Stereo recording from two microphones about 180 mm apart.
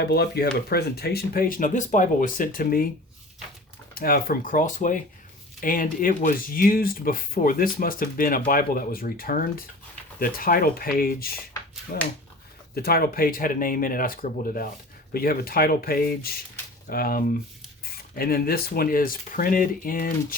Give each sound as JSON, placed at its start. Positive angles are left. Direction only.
{"t": 0.0, "sound": "speech", "side_deg": 65}
{"t": 3.9, "sound": "speech", "side_deg": 55}